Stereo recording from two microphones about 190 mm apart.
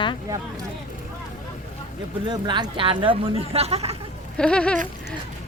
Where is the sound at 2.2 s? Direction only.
25° right (ahead or behind).